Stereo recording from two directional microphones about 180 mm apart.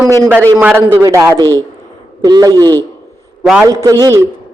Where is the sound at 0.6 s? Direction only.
10° right (ahead or behind).